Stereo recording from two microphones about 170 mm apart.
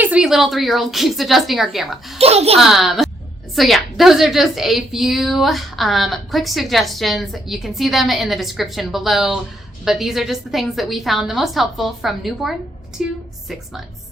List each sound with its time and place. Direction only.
0.0 s a woman's voice: 5° right (ahead or behind)
2.1 s a child's voice: 35° right (ahead or behind)
2.6 s a woman's voice: centre (ahead or behind)